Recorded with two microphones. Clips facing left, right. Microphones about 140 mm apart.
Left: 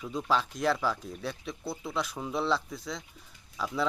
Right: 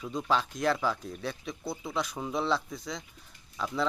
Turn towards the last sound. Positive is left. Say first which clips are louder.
# even
turn(degrees=5)  # may be behind; listen again after turning